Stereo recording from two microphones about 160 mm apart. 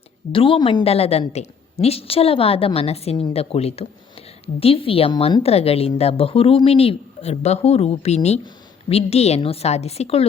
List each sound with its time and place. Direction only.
0.3 s speech: 35° left (ahead or behind)